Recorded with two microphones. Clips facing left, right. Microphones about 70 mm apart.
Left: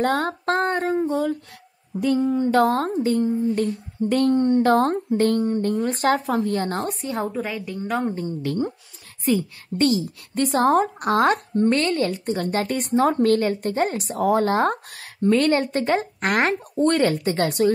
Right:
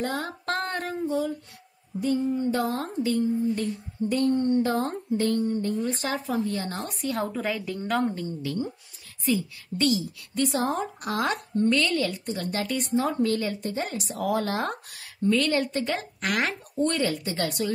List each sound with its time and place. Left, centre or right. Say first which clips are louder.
0.0 s speech: left 8 dB; left
0.5 s female singing: left 8 dB; left
2.0 s a woman's voice: left 5 dB; left
6.9 s a woman's voice: left 3 dB; left
8.4 s a woman's voice: left 5 dB; left